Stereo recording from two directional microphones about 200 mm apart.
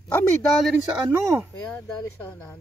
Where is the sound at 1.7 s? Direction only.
5° left (ahead or behind).